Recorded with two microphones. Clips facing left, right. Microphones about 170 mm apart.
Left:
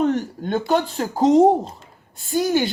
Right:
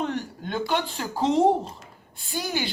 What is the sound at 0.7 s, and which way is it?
A woman's voice, 40° left (ahead or behind).